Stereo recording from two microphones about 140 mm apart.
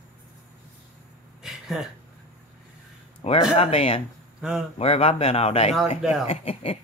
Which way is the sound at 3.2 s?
45° left (ahead or behind).